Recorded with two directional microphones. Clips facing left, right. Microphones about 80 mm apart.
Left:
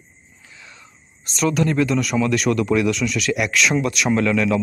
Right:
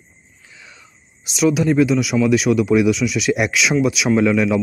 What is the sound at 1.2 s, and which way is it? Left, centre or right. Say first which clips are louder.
A man's voice: right 3 dB; centre.